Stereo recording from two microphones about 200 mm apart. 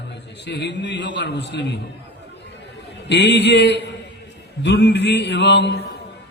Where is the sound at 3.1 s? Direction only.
60° left (ahead or behind).